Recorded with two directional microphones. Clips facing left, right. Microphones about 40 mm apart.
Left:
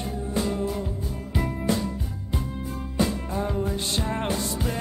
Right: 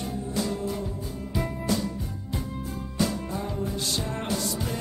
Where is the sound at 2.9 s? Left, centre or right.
Left.